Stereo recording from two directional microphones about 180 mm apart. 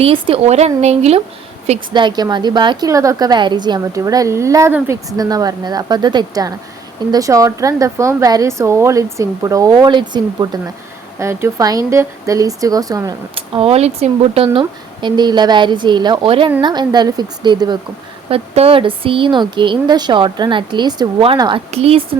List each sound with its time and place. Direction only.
0.0 s speech: 30° right (ahead or behind)
1.9 s a woman's voice: 25° right (ahead or behind)
13.3 s a woman's voice: 30° right (ahead or behind)